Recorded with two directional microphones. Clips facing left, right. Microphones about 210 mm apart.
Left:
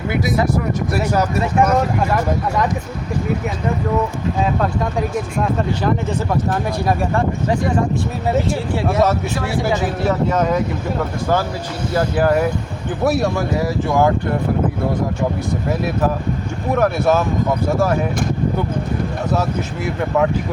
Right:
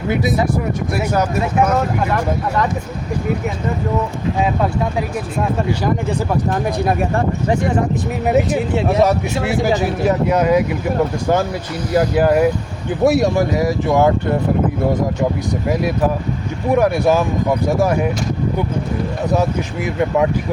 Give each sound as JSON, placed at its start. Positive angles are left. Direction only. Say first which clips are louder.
{"t": 1.4, "sound": "speech", "louder": "left 1 dB", "side_deg": -5}
{"t": 6.3, "sound": "speech", "louder": "right 2 dB", "side_deg": -20}
{"t": 8.3, "sound": "speech", "louder": "right 3 dB", "side_deg": -20}
{"t": 11.9, "sound": "speech", "louder": "right 3 dB", "side_deg": -15}
{"t": 16.7, "sound": "speech", "louder": "right 2 dB", "side_deg": -15}
{"t": 19.3, "sound": "speech", "louder": "right 3 dB", "side_deg": -15}